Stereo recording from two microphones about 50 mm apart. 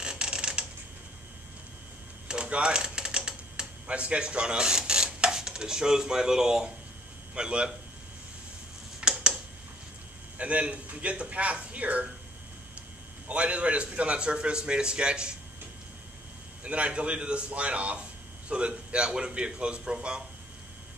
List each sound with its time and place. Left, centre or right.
0.0 s creak: centre
2.2 s typing: centre
7.3 s a man's voice: centre
9.0 s a sound: right
10.3 s a man's voice: right
13.3 s a man's voice: right
16.6 s a man's voice: right